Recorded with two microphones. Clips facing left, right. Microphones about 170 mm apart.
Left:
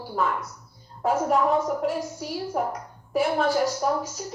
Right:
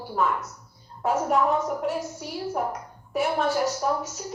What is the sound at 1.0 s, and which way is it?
A woman's voice, 35° left (ahead or behind).